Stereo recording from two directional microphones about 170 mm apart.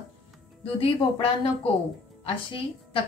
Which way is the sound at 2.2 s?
30° left (ahead or behind).